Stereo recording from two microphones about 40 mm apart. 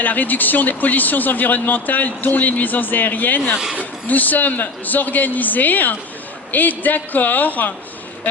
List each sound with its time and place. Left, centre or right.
0.0 s speech: left